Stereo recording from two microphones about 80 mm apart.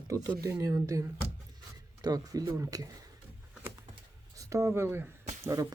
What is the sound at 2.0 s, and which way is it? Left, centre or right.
Speech, right.